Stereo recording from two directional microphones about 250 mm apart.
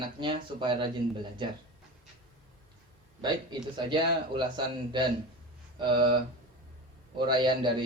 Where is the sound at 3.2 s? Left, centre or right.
Centre.